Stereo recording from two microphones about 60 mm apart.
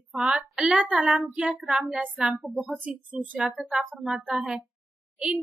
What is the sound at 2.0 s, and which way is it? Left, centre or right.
A woman's voice, right.